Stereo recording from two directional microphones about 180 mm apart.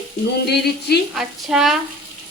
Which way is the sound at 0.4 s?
65° left (ahead or behind).